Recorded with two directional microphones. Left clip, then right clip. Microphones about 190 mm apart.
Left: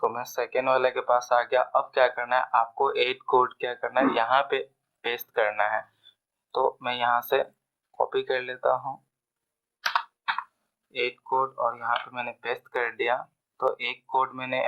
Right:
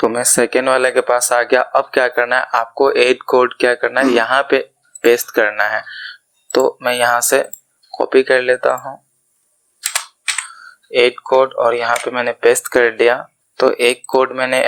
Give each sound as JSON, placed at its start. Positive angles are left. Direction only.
{"t": 0.1, "sound": "speech", "side_deg": -20}
{"t": 10.9, "sound": "speech", "side_deg": -25}